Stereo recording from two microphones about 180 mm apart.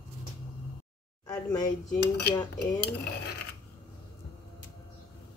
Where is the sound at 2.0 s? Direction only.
65° left (ahead or behind).